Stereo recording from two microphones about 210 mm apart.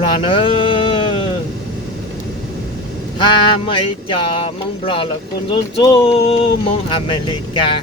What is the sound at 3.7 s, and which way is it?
Speech, 25° left (ahead or behind).